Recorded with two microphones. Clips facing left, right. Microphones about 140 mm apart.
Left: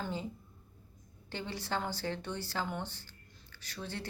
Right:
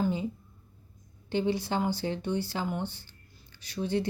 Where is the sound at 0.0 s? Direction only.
15° right (ahead or behind).